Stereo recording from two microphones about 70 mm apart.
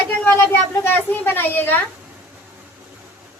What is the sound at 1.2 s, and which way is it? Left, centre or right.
Speech, left.